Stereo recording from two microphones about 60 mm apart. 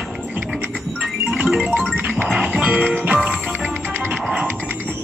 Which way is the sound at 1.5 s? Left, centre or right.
Centre.